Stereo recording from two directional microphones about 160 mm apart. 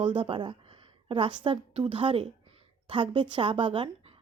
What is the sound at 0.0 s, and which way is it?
A woman's voice, 35° right (ahead or behind).